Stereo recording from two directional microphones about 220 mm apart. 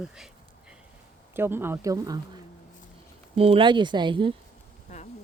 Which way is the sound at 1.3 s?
10° right (ahead or behind).